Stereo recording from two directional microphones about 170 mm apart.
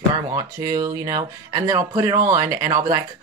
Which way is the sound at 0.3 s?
20° right (ahead or behind).